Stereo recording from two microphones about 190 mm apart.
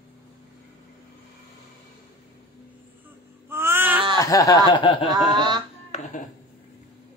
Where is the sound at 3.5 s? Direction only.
10° right (ahead or behind).